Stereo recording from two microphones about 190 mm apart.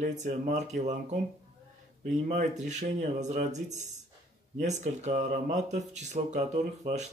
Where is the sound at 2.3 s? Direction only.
40° right (ahead or behind).